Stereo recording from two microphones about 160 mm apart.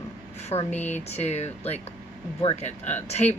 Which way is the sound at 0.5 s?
35° left (ahead or behind).